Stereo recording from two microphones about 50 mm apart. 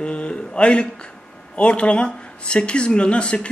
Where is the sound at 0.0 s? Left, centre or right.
Left.